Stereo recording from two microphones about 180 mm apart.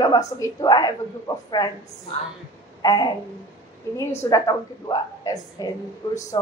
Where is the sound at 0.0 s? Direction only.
20° left (ahead or behind).